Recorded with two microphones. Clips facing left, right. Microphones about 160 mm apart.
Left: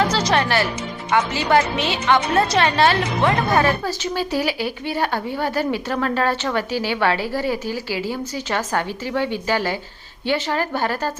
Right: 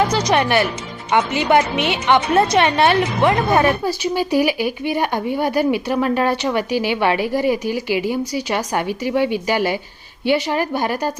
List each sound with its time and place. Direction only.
0.1 s a woman's voice: 20° right (ahead or behind)